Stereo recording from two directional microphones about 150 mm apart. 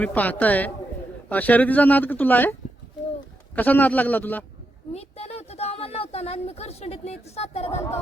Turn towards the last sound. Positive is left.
turn(degrees=45)  # may be behind; listen again after turning